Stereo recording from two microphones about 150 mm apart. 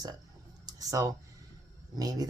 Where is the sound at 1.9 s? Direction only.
25° right (ahead or behind).